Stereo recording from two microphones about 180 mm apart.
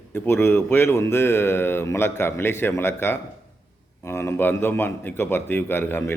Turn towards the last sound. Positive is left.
turn(degrees=10)  # may be behind; listen again after turning